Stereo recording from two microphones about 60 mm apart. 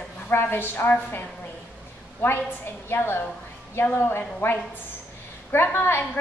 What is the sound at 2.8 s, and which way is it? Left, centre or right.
A woman's voice, left.